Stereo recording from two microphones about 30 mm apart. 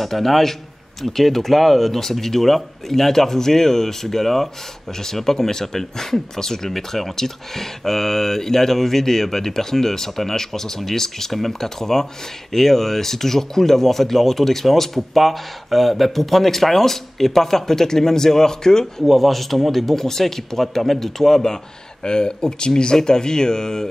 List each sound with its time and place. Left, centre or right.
0.0 s speech: centre
19.0 s speech: centre
22.0 s speech: left